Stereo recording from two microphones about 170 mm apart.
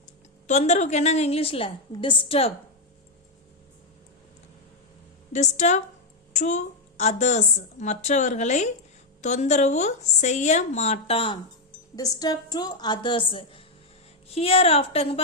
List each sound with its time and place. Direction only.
0.4 s a woman's voice: 40° left (ahead or behind)
5.3 s a woman's voice: 45° left (ahead or behind)
11.9 s a woman's voice: 20° left (ahead or behind)